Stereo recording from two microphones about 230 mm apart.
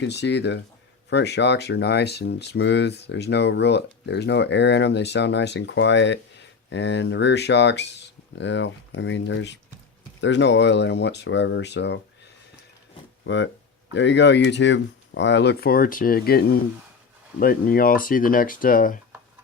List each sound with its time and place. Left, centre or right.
0.0 s speech: left
13.2 s speech: left
17.4 s speech: left